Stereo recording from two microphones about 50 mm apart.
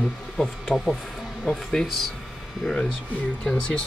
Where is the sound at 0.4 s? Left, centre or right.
Centre.